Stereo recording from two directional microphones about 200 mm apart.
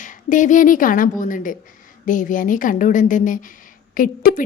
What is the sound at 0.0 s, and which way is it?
A woman's voice, 40° left (ahead or behind).